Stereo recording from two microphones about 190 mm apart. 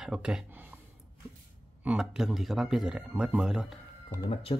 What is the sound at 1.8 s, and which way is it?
Speech, 5° right (ahead or behind).